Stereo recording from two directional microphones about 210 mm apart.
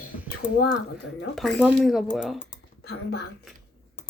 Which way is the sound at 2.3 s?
50° left (ahead or behind).